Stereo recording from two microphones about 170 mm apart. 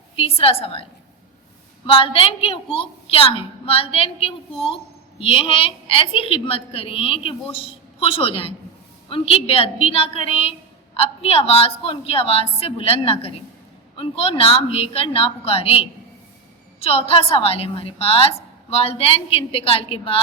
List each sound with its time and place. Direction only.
0.2 s a woman's voice: 35° left (ahead or behind)
1.9 s a woman's voice: 30° left (ahead or behind)